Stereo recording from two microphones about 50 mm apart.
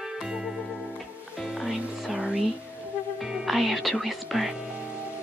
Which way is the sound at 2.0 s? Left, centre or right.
Centre.